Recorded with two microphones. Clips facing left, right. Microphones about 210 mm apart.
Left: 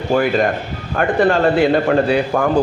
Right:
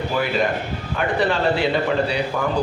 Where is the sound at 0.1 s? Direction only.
50° left (ahead or behind).